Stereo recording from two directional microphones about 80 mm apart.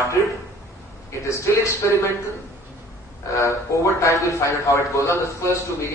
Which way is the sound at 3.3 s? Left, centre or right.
Left.